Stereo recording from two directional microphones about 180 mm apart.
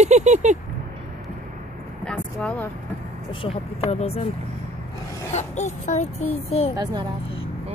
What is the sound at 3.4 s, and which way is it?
Speech, 30° left (ahead or behind).